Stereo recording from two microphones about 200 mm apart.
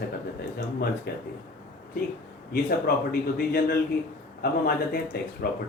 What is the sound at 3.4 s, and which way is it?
A man's voice, 50° left (ahead or behind).